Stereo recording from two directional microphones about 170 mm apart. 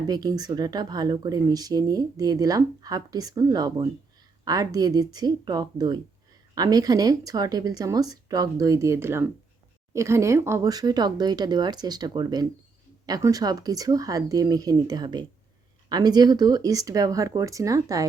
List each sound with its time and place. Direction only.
0.1 s speech: 20° right (ahead or behind)